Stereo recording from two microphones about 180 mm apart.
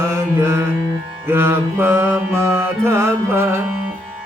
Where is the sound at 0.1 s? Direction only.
15° right (ahead or behind).